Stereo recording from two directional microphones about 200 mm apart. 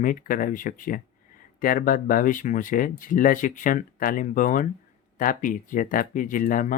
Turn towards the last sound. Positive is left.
turn(degrees=40)  # may be behind; listen again after turning